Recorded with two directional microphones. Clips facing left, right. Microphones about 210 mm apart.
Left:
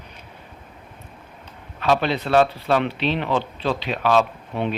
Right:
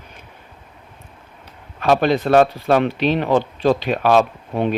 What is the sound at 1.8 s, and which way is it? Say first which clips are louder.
Speech: right 5 dB; 45° right (ahead or behind).